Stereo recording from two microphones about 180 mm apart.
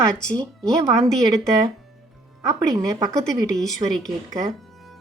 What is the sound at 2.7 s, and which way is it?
Speech, 20° right (ahead or behind).